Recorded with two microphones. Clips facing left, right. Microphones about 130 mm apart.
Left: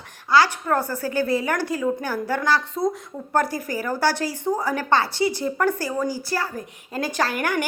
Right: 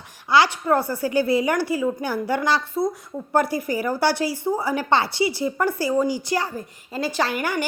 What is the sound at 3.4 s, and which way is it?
Speech, 40° left (ahead or behind).